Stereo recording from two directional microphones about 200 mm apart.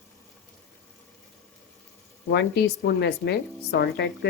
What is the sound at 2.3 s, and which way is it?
Speech, 60° left (ahead or behind).